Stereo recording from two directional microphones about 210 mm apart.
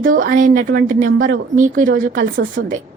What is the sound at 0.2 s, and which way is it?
A woman's voice, 40° right (ahead or behind).